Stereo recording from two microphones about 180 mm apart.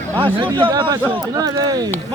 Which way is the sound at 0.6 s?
25° right (ahead or behind).